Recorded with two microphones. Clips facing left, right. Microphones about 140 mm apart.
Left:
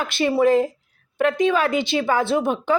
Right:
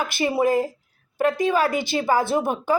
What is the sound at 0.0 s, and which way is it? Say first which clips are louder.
Speech: left 3 dB; 10° right (ahead or behind).